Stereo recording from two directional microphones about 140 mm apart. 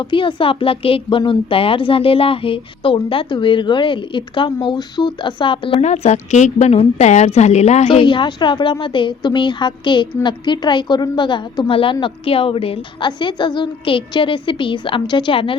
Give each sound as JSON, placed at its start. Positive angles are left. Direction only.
{"t": 0.0, "sound": "a woman's voice", "side_deg": 35}
{"t": 5.8, "sound": "a woman's voice", "side_deg": 55}
{"t": 8.0, "sound": "a woman's voice", "side_deg": 35}